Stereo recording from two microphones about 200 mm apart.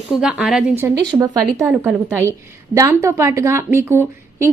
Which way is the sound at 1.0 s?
20° right (ahead or behind).